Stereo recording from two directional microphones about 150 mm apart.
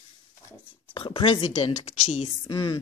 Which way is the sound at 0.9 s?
35° left (ahead or behind).